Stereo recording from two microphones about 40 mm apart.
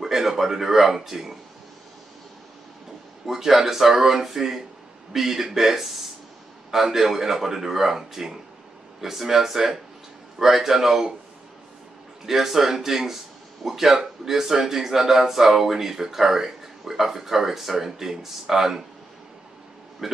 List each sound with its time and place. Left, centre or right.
0.0 s speech: centre
3.3 s speech: centre
12.3 s speech: centre
20.0 s speech: centre